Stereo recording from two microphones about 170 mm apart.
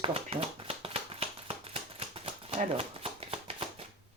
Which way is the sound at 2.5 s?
35° right (ahead or behind).